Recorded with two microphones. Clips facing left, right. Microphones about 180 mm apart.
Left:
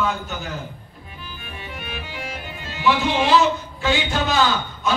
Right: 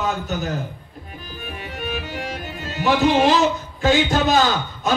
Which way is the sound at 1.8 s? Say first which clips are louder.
Right 7 dB; 45° right (ahead or behind).